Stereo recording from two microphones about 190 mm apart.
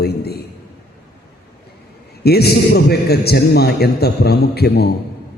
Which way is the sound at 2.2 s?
55° left (ahead or behind).